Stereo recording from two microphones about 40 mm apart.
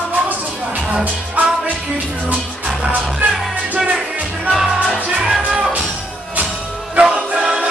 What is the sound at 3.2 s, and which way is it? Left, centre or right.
Music, right.